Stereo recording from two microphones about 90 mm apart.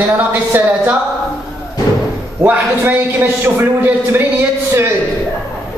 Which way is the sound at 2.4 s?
20° right (ahead or behind).